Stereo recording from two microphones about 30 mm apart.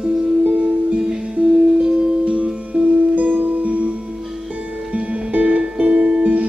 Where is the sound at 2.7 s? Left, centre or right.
Right.